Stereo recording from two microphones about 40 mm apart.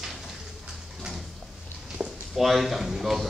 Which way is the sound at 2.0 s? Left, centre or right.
Right.